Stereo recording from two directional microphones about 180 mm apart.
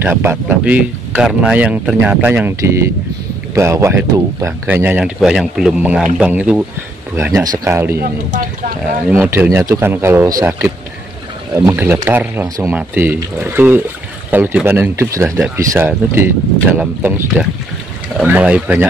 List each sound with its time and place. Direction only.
0.0 s speech: 10° right (ahead or behind)
7.3 s speech: 20° right (ahead or behind)
8.0 s speech: 55° right (ahead or behind)
9.1 s speech: 10° right (ahead or behind)